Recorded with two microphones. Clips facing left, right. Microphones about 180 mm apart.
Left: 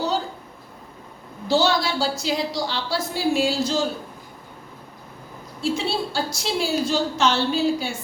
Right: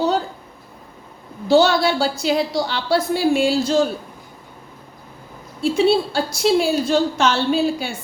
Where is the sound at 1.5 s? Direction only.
60° right (ahead or behind).